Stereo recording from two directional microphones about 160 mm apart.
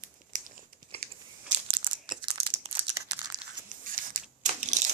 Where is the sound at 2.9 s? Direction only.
25° right (ahead or behind).